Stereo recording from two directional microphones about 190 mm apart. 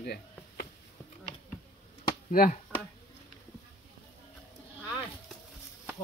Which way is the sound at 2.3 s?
50° left (ahead or behind).